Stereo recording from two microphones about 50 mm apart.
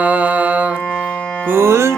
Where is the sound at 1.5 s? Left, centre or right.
Right.